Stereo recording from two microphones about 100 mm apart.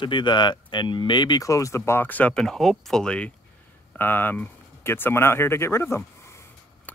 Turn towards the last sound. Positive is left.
turn(degrees=25)  # may be behind; listen again after turning